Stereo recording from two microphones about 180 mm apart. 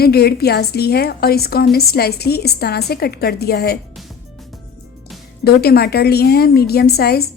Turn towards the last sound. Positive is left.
turn(degrees=60)  # may be behind; listen again after turning